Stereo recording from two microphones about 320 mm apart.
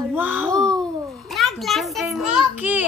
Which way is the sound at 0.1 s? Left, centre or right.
Centre.